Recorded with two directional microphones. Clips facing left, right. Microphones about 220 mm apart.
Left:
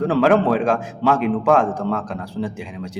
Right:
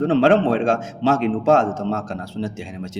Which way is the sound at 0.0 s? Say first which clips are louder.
Right 1 dB; 25° right (ahead or behind).